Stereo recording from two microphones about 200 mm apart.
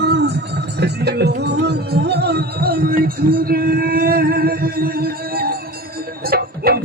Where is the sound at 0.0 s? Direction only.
55° right (ahead or behind).